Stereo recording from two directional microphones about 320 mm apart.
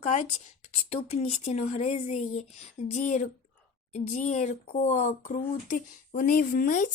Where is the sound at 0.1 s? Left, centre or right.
Left.